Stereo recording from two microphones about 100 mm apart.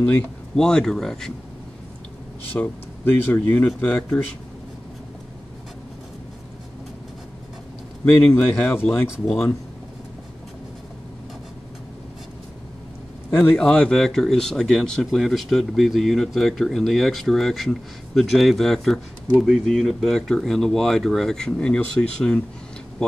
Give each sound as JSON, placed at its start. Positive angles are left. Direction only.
{"t": 0.0, "sound": "speech", "side_deg": 5}
{"t": 2.5, "sound": "speech", "side_deg": 20}
{"t": 8.0, "sound": "speech", "side_deg": 15}
{"t": 13.4, "sound": "speech", "side_deg": 10}